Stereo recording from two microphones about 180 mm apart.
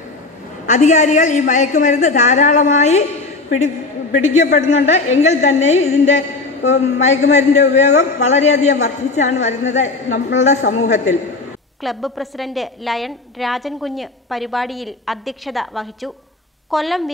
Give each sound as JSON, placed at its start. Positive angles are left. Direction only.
{"t": 0.7, "sound": "a woman's voice", "side_deg": 45}
{"t": 11.8, "sound": "a woman's voice", "side_deg": 0}